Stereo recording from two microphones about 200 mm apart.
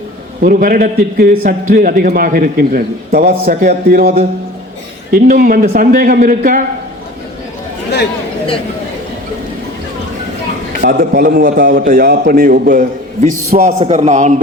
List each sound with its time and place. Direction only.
0.4 s a man's voice: 45° right (ahead or behind)
5.1 s a man's voice: 45° right (ahead or behind)
10.8 s a man's voice: 45° right (ahead or behind)